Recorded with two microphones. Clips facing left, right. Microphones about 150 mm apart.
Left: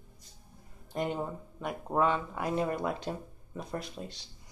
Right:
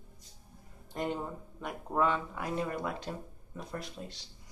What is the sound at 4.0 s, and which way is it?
Speech, 35° left (ahead or behind).